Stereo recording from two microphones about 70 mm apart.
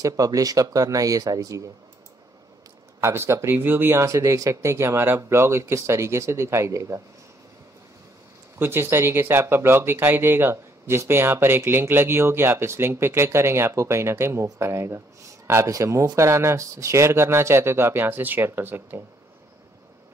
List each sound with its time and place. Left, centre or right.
0.0 s speech: right
3.0 s speech: right
4.0 s speech: right
8.5 s speech: right